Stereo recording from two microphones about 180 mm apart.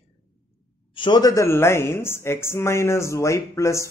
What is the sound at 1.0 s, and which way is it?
Speech, 25° left (ahead or behind).